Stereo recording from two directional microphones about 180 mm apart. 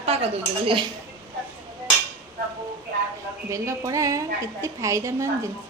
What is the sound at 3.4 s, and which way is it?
A woman's voice, 15° right (ahead or behind).